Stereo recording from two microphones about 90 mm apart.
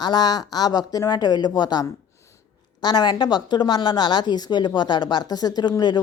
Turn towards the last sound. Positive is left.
turn(degrees=45)  # may be behind; listen again after turning